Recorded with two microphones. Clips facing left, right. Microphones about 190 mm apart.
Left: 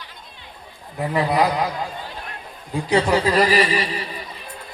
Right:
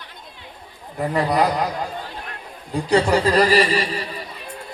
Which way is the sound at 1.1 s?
5° left (ahead or behind).